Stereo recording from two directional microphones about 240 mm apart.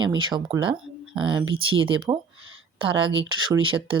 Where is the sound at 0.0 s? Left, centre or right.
Centre.